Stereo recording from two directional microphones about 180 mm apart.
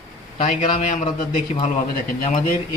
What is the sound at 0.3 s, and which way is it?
A man's voice, 40° left (ahead or behind).